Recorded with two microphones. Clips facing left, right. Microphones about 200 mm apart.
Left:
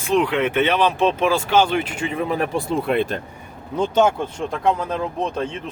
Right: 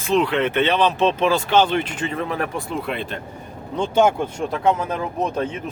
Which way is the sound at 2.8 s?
50° left (ahead or behind).